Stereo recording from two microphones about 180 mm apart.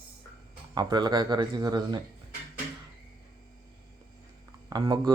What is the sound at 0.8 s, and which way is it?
Speech, 25° right (ahead or behind).